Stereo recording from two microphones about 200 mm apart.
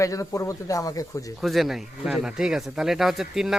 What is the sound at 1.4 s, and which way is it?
A man's voice, centre (ahead or behind).